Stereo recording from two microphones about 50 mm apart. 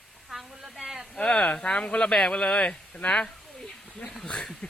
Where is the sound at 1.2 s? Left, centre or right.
Centre.